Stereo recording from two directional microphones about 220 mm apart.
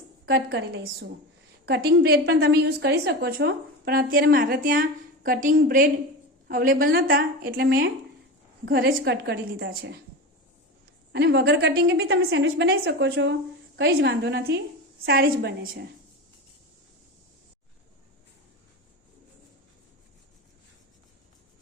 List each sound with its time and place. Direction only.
0.3 s a woman's voice: 50° right (ahead or behind)
11.1 s a woman's voice: 50° right (ahead or behind)